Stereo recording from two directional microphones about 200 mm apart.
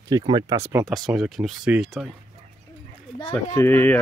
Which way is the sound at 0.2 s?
20° right (ahead or behind).